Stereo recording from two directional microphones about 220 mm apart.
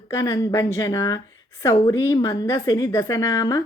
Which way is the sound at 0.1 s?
15° left (ahead or behind).